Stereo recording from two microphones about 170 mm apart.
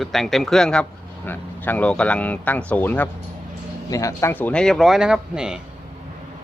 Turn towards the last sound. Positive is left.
turn(degrees=-5)  # may be behind; listen again after turning